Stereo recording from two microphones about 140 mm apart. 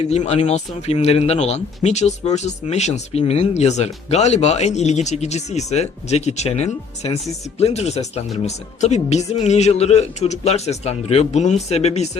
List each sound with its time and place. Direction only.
0.0 s a man's voice: 50° left (ahead or behind)